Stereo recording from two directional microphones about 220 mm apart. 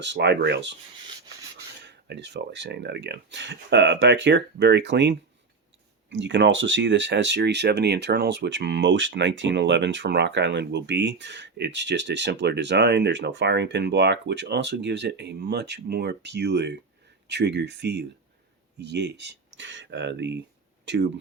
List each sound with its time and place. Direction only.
0.0 s speech: 50° right (ahead or behind)
1.8 s speech: 50° right (ahead or behind)